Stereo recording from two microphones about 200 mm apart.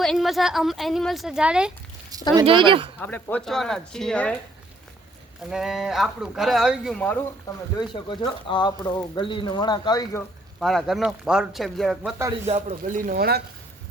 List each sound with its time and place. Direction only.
0.0 s speech: centre (ahead or behind)
2.3 s speech: 25° right (ahead or behind)
3.0 s speech: 10° left (ahead or behind)
5.5 s speech: centre (ahead or behind)
7.8 s speech: 20° left (ahead or behind)
10.6 s speech: centre (ahead or behind)
12.5 s speech: 35° right (ahead or behind); by 13.4 s 50° right (ahead or behind)